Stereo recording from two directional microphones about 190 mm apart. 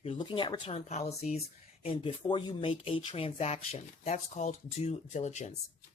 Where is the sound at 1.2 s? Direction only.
45° left (ahead or behind).